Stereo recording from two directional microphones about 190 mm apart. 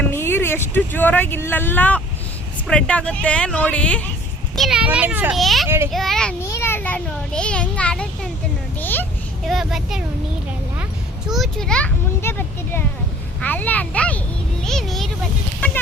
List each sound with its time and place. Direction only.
0.0 s a sound: 10° left (ahead or behind)
0.7 s a woman's voice: 10° left (ahead or behind)
5.6 s a child's voice: 10° right (ahead or behind)
5.9 s a child's voice: centre (ahead or behind)
6.4 s a child's voice: 15° left (ahead or behind); by 10.0 s centre (ahead or behind)
11.3 s a child's voice: centre (ahead or behind)